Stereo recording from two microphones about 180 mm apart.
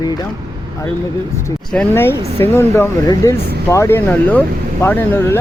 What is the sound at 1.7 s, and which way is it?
Speech, 10° left (ahead or behind).